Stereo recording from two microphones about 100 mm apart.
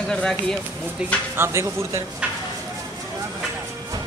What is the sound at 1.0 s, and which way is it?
Speech, 15° right (ahead or behind).